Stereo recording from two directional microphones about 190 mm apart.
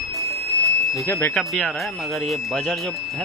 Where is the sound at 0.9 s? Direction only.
15° left (ahead or behind).